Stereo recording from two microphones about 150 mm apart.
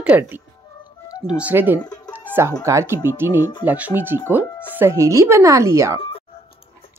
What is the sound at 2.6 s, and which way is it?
A woman's voice, 20° right (ahead or behind).